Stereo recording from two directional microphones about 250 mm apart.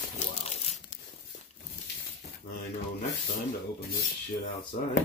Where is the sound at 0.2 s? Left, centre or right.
Left.